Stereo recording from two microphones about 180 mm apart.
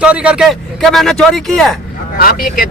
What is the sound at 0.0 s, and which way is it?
Speech, 5° right (ahead or behind).